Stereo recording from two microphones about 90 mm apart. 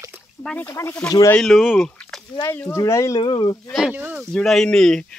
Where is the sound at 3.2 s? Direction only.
65° left (ahead or behind).